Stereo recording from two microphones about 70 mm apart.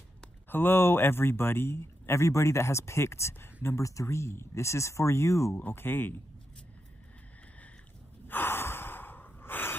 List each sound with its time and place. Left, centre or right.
0.5 s a man's voice: left
5.6 s a man's voice: left
8.3 s gasp: left